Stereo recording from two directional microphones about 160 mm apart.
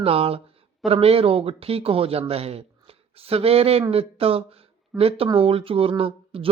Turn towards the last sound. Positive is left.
turn(degrees=-35)  # may be behind; listen again after turning